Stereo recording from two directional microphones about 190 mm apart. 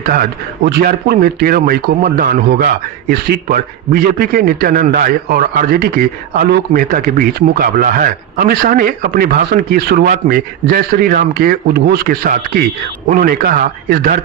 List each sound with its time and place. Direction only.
0.0 s a man's voice: 50° right (ahead or behind)